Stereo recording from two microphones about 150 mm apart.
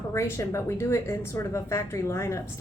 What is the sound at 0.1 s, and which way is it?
A woman's voice, 20° left (ahead or behind).